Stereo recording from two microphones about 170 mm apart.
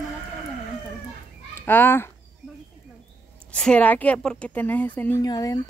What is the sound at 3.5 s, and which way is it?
Speech, 5° left (ahead or behind).